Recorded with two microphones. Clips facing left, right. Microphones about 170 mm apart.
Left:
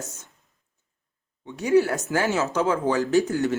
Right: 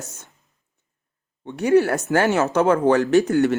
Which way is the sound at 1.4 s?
65° right (ahead or behind).